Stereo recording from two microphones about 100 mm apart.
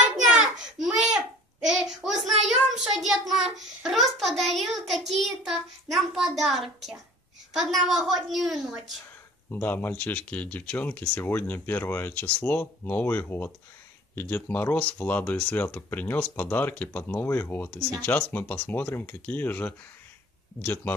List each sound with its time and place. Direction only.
0.3 s a sound: 5° right (ahead or behind)
7.5 s a woman's voice: centre (ahead or behind)
9.5 s speech: 20° left (ahead or behind)